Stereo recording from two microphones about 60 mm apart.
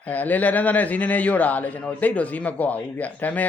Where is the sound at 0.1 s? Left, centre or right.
Left.